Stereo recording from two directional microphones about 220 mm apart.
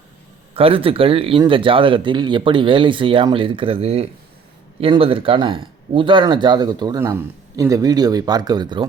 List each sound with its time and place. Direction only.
0.5 s speech: 25° right (ahead or behind)